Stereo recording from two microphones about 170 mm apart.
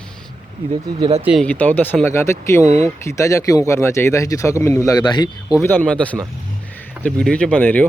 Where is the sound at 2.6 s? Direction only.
40° right (ahead or behind).